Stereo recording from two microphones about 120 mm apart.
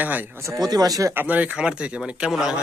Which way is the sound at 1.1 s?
15° right (ahead or behind).